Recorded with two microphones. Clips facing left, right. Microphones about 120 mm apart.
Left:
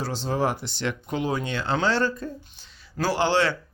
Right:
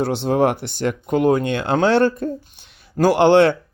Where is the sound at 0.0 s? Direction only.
60° right (ahead or behind).